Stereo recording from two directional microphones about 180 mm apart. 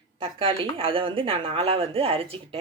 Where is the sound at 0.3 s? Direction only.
30° right (ahead or behind).